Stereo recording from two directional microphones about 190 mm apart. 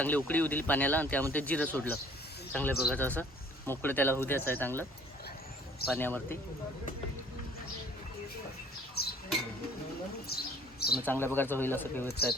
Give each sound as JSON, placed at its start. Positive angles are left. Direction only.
{"t": 0.0, "sound": "speech", "side_deg": 10}
{"t": 6.0, "sound": "speech", "side_deg": 10}
{"t": 9.0, "sound": "a sound", "side_deg": 55}
{"t": 10.2, "sound": "bird", "side_deg": 55}
{"t": 11.0, "sound": "speech", "side_deg": 10}